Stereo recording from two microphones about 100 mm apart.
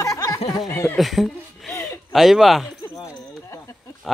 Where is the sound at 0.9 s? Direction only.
Centre (ahead or behind).